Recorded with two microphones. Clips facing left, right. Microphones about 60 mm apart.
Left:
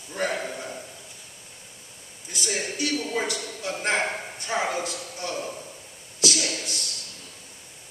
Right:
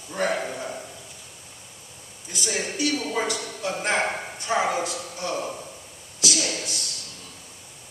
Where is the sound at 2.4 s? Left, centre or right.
Centre.